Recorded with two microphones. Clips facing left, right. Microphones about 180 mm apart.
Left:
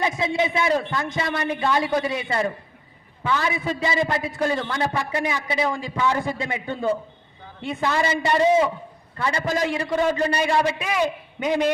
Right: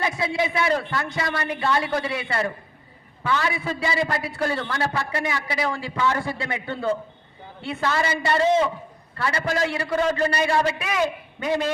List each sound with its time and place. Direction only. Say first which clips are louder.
0.0 s a man's voice: left 2 dB; 20° left (ahead or behind)